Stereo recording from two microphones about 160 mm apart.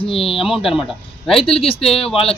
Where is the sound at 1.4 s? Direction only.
35° left (ahead or behind).